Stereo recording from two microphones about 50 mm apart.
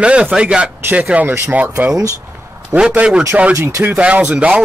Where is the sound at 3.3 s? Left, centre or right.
Right.